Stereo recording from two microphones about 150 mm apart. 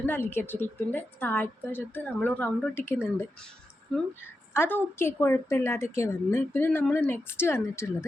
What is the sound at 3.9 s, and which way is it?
Speech, 5° left (ahead or behind).